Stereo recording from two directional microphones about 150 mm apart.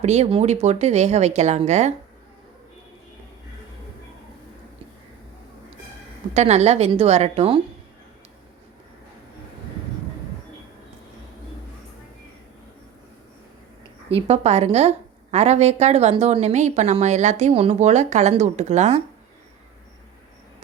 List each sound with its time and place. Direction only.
0.0 s a woman's voice: 45° right (ahead or behind)
6.3 s a woman's voice: 45° right (ahead or behind)
14.1 s a woman's voice: 40° right (ahead or behind)